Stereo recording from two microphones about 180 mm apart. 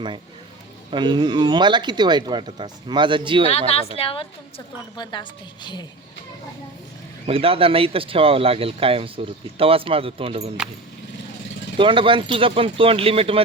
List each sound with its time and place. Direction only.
0.9 s speech: 25° right (ahead or behind)
3.7 s a woman's voice: 35° left (ahead or behind)
7.3 s speech: 30° right (ahead or behind)
11.8 s speech: 30° right (ahead or behind)